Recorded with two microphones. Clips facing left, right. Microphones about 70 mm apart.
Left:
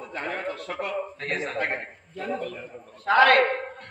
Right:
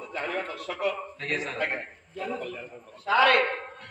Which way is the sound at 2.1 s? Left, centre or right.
Left.